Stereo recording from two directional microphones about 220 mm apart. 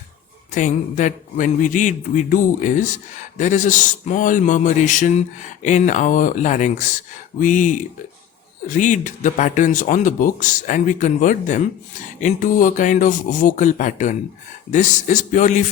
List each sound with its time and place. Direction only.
0.5 s a man's voice: 35° left (ahead or behind)